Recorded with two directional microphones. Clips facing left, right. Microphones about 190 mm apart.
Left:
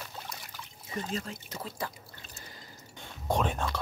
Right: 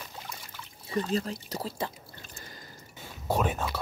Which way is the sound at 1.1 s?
35° right (ahead or behind).